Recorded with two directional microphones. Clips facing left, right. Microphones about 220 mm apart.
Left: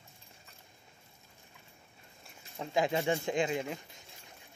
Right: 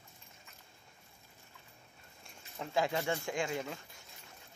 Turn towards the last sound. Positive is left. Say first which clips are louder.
# left 3 dB
turn(degrees=20)  # may be behind; listen again after turning